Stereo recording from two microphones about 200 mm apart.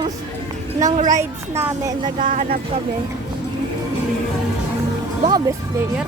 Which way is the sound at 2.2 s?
40° right (ahead or behind).